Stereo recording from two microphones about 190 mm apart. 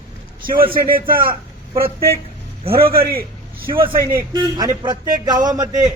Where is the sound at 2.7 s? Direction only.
50° right (ahead or behind).